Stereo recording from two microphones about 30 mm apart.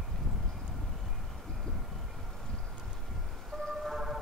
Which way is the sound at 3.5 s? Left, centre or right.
Centre.